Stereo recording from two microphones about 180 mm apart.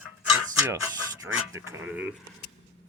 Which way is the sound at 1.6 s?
10° right (ahead or behind).